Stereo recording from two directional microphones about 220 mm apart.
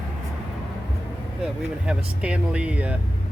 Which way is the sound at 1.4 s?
5° right (ahead or behind).